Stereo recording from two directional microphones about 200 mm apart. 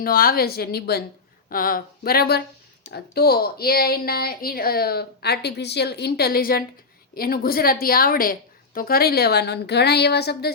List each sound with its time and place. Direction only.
0.0 s speech: 45° left (ahead or behind)